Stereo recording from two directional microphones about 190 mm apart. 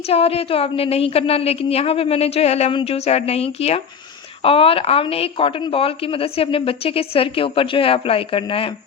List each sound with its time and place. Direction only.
0.1 s a woman's voice: 30° left (ahead or behind)